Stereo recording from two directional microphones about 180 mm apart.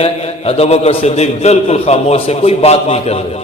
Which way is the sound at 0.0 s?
35° left (ahead or behind).